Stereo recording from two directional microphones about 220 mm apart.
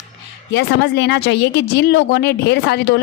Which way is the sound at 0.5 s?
50° left (ahead or behind).